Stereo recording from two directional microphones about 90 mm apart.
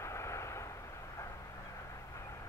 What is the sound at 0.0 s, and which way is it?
Vehicle, 30° left (ahead or behind).